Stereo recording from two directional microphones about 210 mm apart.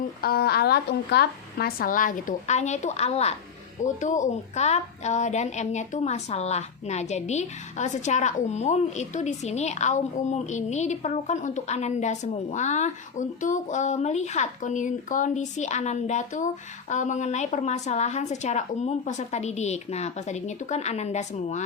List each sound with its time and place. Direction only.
0.2 s a woman's voice: 50° left (ahead or behind)